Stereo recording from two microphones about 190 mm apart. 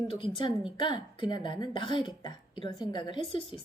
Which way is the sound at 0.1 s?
25° left (ahead or behind).